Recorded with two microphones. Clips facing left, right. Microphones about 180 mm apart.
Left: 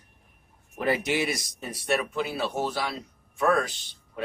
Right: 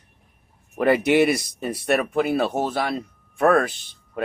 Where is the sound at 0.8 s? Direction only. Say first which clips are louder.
Right 9 dB; 65° right (ahead or behind).